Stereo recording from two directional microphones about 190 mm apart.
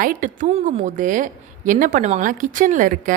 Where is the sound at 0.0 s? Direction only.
45° right (ahead or behind).